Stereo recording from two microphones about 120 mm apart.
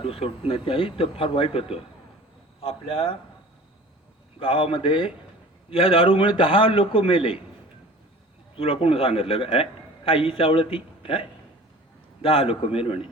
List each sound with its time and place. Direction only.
0.0 s a man's voice: 50° left (ahead or behind)
4.4 s a man's voice: 50° left (ahead or behind)
8.5 s a man's voice: 50° left (ahead or behind)